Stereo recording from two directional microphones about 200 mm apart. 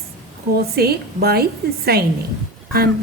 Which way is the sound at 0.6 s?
50° right (ahead or behind).